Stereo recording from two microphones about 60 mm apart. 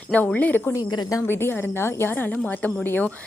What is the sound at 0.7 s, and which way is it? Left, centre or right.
Speech, left.